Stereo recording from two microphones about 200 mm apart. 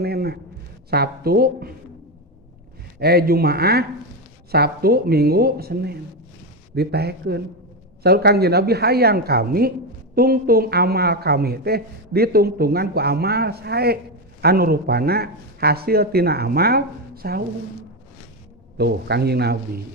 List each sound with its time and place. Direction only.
0.0 s a man's voice: 50° right (ahead or behind)
3.0 s speech: 50° right (ahead or behind)
18.8 s speech: 55° right (ahead or behind)